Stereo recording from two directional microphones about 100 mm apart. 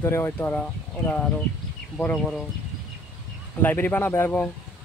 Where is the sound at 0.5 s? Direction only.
10° left (ahead or behind).